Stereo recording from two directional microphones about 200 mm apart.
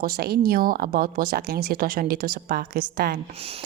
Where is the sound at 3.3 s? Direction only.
30° right (ahead or behind).